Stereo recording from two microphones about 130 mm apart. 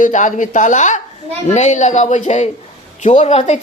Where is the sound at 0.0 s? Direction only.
75° left (ahead or behind).